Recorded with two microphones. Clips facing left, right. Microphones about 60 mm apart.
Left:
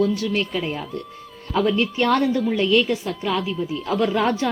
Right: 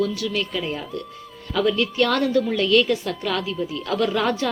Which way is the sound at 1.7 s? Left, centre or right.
Left.